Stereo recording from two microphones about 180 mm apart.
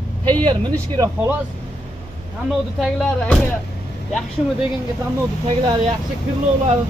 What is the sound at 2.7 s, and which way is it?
Speech, centre (ahead or behind).